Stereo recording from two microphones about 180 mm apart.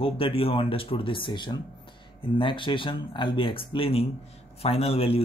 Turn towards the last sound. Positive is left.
turn(degrees=30)  # may be behind; listen again after turning